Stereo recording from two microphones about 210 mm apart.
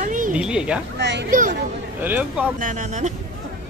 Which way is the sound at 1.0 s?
55° right (ahead or behind).